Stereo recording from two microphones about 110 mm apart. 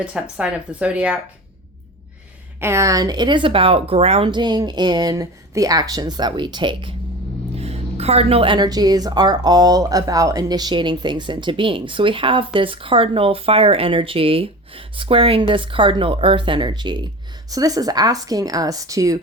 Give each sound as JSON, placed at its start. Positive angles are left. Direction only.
{"t": 0.0, "sound": "speech", "side_deg": -10}
{"t": 2.6, "sound": "speech", "side_deg": -25}
{"t": 4.3, "sound": "speech", "side_deg": -40}
{"t": 7.6, "sound": "music", "side_deg": -70}
{"t": 8.5, "sound": "speech", "side_deg": -40}